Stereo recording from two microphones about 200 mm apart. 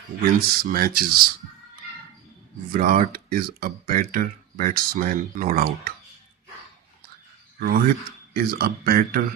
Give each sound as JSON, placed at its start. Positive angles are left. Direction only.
{"t": 0.3, "sound": "speech", "side_deg": -50}
{"t": 2.7, "sound": "speech", "side_deg": -40}
{"t": 7.6, "sound": "speech", "side_deg": -50}